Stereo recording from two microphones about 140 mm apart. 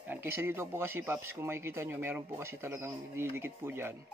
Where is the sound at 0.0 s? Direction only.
15° right (ahead or behind).